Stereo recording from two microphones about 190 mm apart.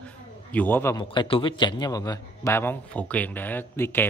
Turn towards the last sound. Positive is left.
turn(degrees=10)  # may be behind; listen again after turning